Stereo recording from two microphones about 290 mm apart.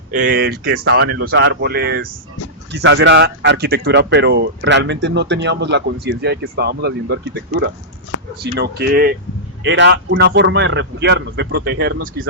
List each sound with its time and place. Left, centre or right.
0.1 s speech: right